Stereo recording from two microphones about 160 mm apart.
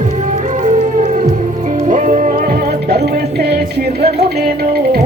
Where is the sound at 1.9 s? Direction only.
55° right (ahead or behind); by 5.0 s 75° right (ahead or behind).